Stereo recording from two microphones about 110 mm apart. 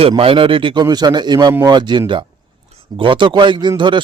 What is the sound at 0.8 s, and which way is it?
A man's voice, 40° right (ahead or behind).